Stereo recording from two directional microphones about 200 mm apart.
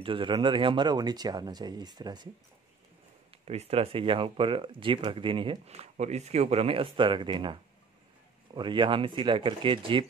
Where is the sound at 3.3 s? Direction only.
30° right (ahead or behind).